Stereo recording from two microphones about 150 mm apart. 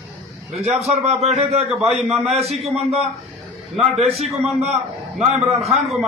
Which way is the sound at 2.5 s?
45° right (ahead or behind).